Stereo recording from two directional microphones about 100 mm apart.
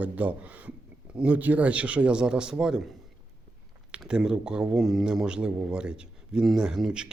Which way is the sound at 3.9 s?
10° right (ahead or behind).